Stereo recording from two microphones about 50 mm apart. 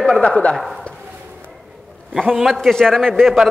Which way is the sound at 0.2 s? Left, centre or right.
Left.